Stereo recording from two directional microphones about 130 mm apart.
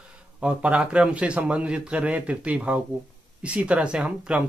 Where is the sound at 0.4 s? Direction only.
10° right (ahead or behind).